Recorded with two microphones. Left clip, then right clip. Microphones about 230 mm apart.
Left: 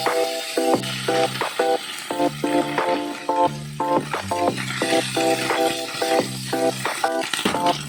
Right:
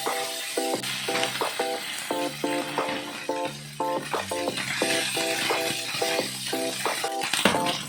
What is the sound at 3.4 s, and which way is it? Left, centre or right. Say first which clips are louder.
Music: left 8 dB; left.